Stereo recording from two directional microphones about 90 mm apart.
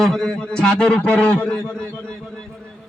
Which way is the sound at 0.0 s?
5° left (ahead or behind).